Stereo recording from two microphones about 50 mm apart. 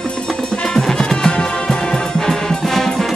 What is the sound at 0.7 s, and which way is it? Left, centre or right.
Music, centre.